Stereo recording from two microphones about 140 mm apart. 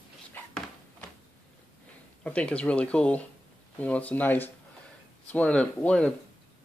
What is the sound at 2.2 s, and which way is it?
Speech, 10° left (ahead or behind).